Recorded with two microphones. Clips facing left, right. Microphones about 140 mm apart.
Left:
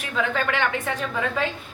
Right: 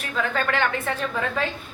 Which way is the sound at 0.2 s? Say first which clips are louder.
Even; 15° left (ahead or behind).